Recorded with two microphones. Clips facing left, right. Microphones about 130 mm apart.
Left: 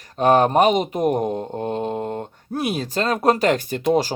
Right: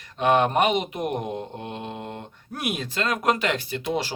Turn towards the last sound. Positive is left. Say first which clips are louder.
# left 8 dB
turn(degrees=45)  # may be behind; listen again after turning